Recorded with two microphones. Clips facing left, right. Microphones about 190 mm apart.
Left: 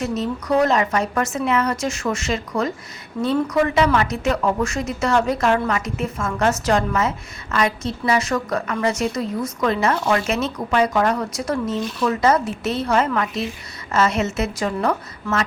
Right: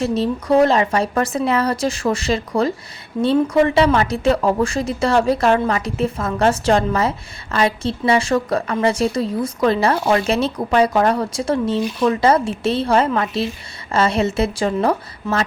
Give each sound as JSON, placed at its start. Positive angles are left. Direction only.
{"t": 0.0, "sound": "a woman's voice", "side_deg": -30}